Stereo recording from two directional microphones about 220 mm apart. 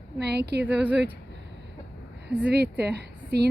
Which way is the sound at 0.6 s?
5° right (ahead or behind).